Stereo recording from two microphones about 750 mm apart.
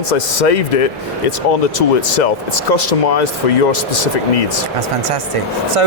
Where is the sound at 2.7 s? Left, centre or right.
Left.